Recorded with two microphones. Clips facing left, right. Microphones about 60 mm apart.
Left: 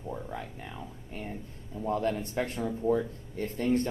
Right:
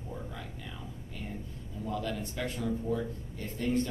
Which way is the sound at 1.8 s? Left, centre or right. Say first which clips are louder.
Left 6 dB; left.